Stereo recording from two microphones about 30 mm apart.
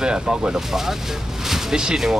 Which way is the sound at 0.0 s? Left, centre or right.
Right.